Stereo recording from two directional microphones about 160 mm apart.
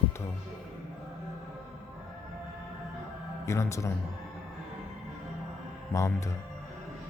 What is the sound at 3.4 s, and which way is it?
Speech, 20° left (ahead or behind).